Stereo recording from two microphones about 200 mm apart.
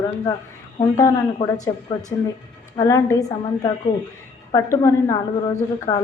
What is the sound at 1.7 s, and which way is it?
Speech, 20° left (ahead or behind).